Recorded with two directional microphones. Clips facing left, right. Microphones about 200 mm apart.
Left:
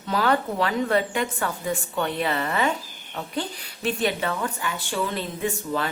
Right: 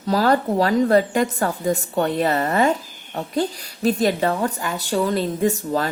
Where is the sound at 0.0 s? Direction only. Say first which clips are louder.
Right 5 dB; 40° right (ahead or behind).